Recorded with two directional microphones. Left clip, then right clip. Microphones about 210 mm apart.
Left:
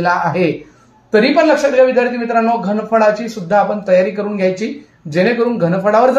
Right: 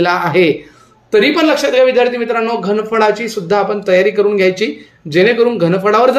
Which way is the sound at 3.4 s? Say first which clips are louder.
Left 1 dB; 40° right (ahead or behind).